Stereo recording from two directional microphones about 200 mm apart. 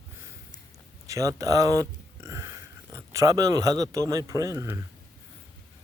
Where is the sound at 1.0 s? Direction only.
15° right (ahead or behind).